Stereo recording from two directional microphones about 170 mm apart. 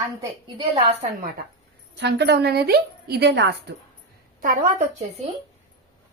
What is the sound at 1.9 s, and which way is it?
A woman's voice, 85° right.